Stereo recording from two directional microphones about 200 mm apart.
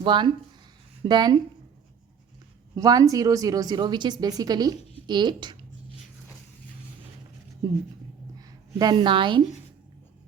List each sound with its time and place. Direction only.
0.0 s a woman's voice: 25° right (ahead or behind)
2.7 s a woman's voice: 15° right (ahead or behind)
8.4 s a woman's voice: 20° right (ahead or behind)